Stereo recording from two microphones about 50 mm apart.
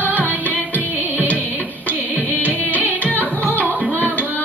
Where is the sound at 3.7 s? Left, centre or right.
Right.